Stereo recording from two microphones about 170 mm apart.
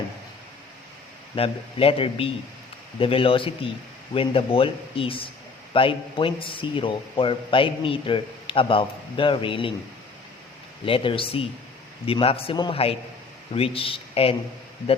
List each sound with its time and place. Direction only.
1.4 s a man's voice: 35° left (ahead or behind)
10.8 s a man's voice: 30° left (ahead or behind)